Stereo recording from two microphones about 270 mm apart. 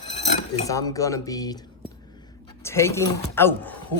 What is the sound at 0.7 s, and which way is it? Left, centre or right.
Speech, centre.